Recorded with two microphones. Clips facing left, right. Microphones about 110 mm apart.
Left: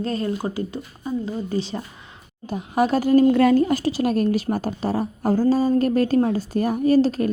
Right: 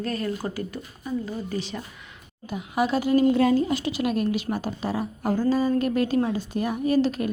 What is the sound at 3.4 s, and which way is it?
Speech, 60° left (ahead or behind).